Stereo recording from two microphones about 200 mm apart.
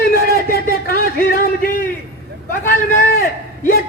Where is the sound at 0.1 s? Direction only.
50° left (ahead or behind).